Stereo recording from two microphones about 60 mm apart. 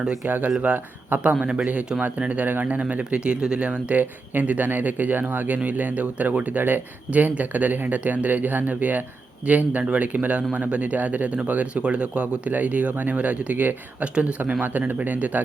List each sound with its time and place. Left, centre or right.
0.3 s speech: right
14.6 s speech: right